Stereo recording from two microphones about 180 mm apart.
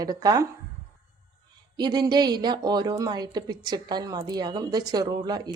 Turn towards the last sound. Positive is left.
turn(degrees=-20)  # may be behind; listen again after turning